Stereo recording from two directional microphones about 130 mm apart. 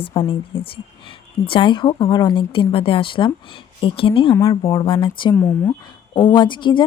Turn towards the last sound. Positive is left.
turn(degrees=35)  # may be behind; listen again after turning